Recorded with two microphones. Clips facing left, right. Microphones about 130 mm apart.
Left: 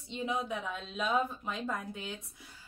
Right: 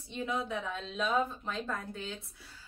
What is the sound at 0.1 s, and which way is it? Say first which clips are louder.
A woman's voice: even; 20° left (ahead or behind).